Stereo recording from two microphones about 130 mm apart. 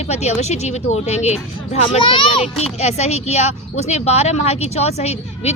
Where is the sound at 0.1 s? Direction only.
60° left (ahead or behind); by 2.5 s 40° left (ahead or behind).